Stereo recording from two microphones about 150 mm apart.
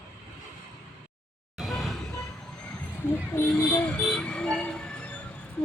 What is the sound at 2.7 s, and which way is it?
Vehicle, 15° left (ahead or behind).